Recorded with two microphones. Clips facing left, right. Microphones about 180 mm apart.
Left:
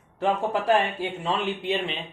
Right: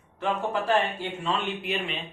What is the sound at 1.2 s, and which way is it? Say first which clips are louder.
Speech: left 1 dB; 30° left (ahead or behind).